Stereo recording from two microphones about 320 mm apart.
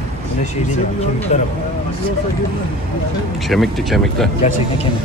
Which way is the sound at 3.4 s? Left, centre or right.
Centre.